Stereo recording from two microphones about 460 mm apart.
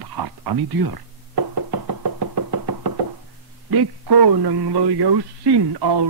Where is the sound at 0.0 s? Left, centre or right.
Right.